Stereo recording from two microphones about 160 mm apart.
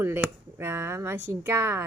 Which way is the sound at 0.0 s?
15° right (ahead or behind).